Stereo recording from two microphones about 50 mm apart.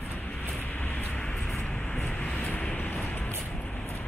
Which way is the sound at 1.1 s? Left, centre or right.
Centre.